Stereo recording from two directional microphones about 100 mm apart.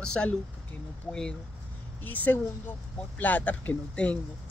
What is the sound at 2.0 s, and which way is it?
Speech, 20° left (ahead or behind).